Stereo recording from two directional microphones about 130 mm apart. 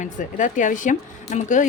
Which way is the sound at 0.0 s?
80° left.